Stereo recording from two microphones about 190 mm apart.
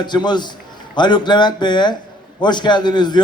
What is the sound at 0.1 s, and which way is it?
A man's voice, 25° left (ahead or behind).